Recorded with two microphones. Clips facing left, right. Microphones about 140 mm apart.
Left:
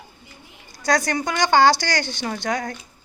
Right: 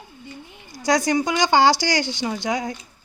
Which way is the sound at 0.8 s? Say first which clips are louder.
Right 2 dB; 15° right (ahead or behind).